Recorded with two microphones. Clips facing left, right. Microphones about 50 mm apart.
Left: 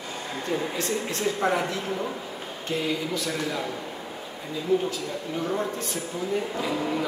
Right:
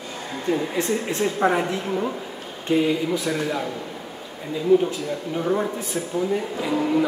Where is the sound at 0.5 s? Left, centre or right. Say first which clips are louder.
Right 4 dB; centre.